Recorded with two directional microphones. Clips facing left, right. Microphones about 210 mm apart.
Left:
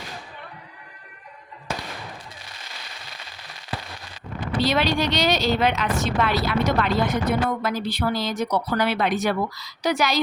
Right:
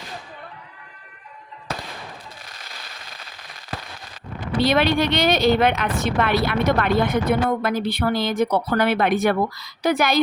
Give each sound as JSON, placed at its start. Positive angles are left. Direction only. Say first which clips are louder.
{"t": 4.6, "sound": "speech", "louder": "right 3 dB", "side_deg": -55}